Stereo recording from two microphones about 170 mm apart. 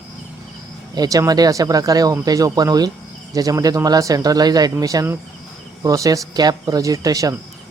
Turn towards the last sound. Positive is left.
turn(degrees=-20)  # may be behind; listen again after turning